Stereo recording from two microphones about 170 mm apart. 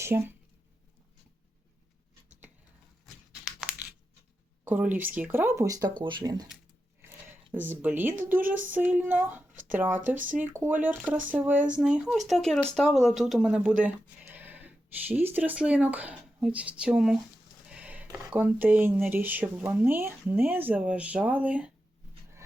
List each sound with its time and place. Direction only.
0.0 s speech: 10° right (ahead or behind)
4.6 s speech: 10° right (ahead or behind)
7.0 s a sound: 10° right (ahead or behind)
7.5 s speech: 10° right (ahead or behind)